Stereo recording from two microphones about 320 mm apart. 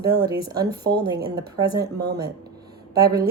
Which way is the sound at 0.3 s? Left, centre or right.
Centre.